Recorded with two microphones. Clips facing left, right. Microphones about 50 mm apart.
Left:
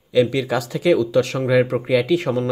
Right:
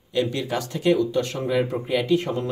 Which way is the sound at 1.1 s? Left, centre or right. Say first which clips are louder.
Left 6 dB; left.